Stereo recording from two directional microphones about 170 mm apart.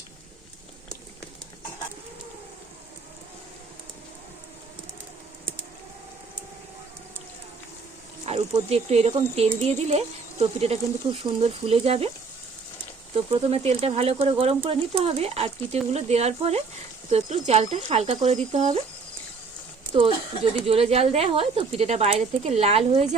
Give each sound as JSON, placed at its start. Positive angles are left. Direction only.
{"t": 8.3, "sound": "a sound", "side_deg": -40}
{"t": 8.7, "sound": "speech", "side_deg": -40}
{"t": 13.5, "sound": "speech", "side_deg": -35}
{"t": 20.0, "sound": "speech", "side_deg": -35}